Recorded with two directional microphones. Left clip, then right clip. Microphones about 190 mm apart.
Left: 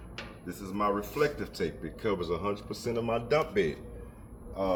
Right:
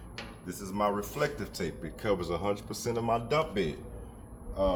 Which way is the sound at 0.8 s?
25° right (ahead or behind).